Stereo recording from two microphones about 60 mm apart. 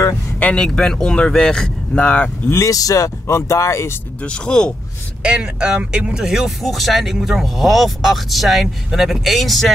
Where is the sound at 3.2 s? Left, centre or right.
Left.